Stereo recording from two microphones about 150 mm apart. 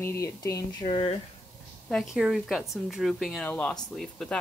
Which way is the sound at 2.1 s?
Centre (ahead or behind).